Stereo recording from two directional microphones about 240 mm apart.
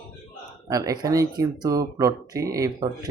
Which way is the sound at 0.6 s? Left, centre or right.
Centre.